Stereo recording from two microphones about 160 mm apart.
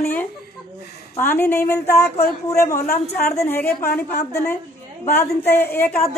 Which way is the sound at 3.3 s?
15° left (ahead or behind).